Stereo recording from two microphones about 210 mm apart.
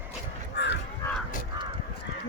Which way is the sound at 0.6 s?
55° left (ahead or behind).